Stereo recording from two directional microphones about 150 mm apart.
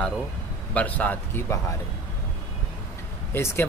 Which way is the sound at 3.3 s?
15° left (ahead or behind).